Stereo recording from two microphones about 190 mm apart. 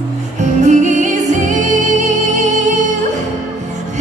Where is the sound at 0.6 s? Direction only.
40° right (ahead or behind).